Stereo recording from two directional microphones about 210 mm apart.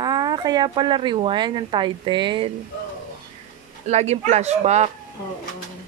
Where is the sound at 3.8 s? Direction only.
30° right (ahead or behind).